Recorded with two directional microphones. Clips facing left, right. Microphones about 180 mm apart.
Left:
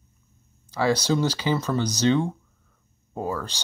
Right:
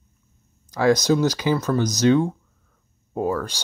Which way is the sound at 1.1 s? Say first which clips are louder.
Right 4 dB; 10° right (ahead or behind).